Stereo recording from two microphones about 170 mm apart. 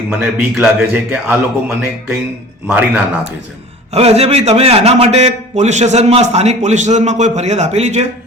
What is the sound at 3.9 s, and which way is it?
A man's voice, 35° right (ahead or behind).